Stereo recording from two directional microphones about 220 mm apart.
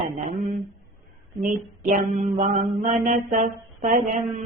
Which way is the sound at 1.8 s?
35° right (ahead or behind).